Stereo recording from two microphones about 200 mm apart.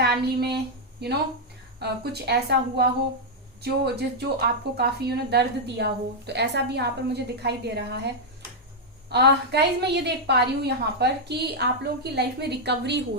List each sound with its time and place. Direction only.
0.0 s a woman's voice: 55° right (ahead or behind)
9.0 s a woman's voice: 55° right (ahead or behind)